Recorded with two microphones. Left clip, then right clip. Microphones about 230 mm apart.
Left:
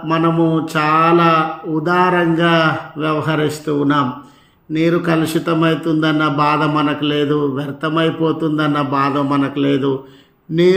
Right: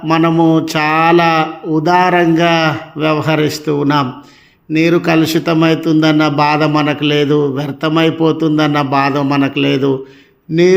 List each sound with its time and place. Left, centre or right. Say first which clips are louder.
0.1 s a man's voice: right 4 dB; right